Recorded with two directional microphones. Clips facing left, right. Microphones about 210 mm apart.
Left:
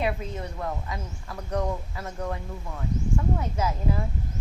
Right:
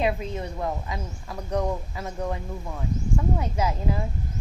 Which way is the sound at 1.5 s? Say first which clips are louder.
Right 2 dB; 15° right (ahead or behind).